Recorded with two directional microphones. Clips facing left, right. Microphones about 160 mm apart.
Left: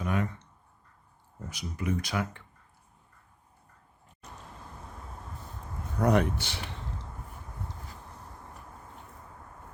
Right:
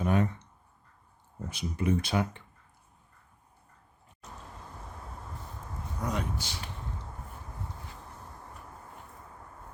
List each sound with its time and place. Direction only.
0.0 s speech: 30° right (ahead or behind)
1.5 s speech: 25° right (ahead or behind)
6.0 s speech: 65° left (ahead or behind)